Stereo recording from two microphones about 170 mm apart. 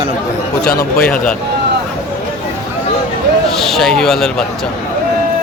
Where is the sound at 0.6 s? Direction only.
65° left (ahead or behind).